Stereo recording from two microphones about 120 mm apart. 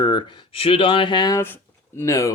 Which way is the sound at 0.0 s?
40° left (ahead or behind).